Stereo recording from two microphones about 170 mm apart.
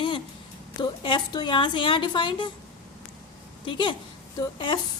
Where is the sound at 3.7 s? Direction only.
30° left (ahead or behind).